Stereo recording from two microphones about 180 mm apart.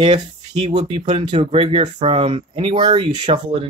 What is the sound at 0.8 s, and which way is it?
Speech, 35° right (ahead or behind).